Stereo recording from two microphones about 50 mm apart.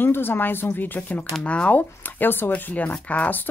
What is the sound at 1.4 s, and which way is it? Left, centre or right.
Speech, left.